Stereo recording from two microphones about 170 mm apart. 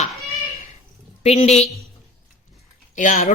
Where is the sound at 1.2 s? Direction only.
40° left (ahead or behind).